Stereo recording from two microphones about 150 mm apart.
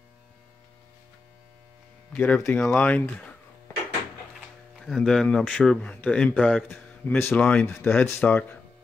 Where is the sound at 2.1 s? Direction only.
10° left (ahead or behind).